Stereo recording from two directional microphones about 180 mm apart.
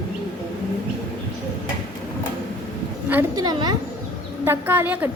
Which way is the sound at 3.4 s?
25° right (ahead or behind).